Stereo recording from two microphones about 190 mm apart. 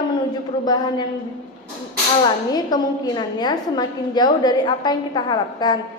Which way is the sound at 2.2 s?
20° left (ahead or behind).